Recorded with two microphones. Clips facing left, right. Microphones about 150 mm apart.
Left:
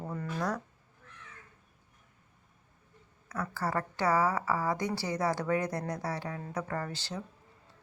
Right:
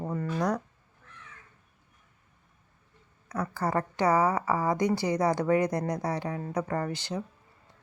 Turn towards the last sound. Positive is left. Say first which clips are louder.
# right 5 dB
turn(degrees=-15)  # may be behind; listen again after turning